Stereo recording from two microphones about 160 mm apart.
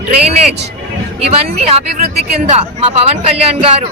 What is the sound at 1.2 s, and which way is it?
Speech, 40° right (ahead or behind).